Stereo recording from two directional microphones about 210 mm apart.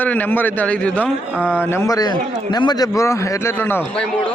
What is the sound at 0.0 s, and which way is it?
A man's voice, 10° left (ahead or behind).